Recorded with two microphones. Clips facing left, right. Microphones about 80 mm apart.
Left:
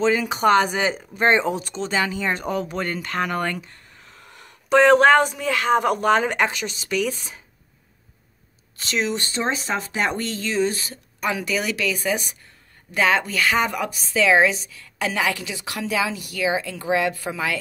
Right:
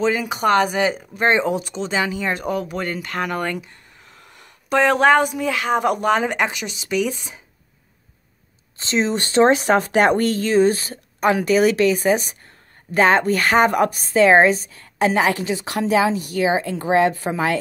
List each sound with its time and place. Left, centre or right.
0.0 s speech: centre
8.7 s speech: right
9.3 s a woman's voice: right